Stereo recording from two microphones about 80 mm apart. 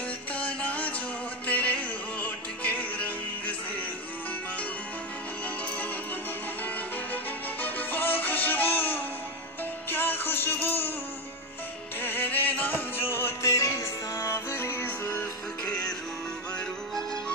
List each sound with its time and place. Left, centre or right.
0.3 s music: centre
7.6 s music: left
12.0 s music: left
15.6 s music: centre